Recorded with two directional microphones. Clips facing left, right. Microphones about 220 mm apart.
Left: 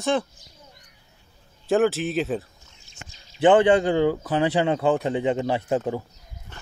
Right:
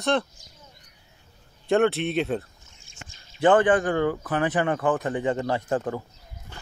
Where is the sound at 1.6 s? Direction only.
Centre (ahead or behind).